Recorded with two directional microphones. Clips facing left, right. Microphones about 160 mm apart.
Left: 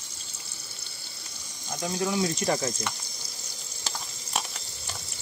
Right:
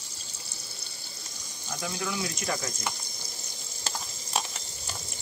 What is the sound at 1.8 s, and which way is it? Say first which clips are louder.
Speech: left 6 dB; 30° left (ahead or behind).